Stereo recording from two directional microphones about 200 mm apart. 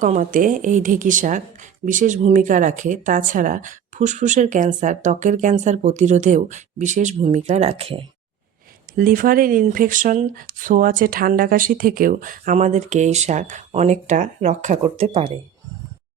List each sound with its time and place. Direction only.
0.0 s speech: 40° right (ahead or behind)
9.0 s speech: 45° right (ahead or behind)